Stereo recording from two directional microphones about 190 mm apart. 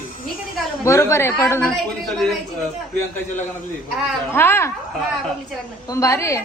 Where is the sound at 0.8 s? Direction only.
15° left (ahead or behind).